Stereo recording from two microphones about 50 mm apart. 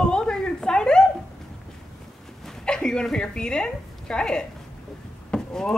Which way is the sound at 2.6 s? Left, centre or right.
Centre.